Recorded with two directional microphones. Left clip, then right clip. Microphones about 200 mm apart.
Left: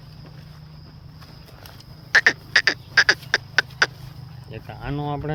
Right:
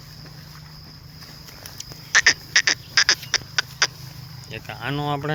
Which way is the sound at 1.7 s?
20° left (ahead or behind).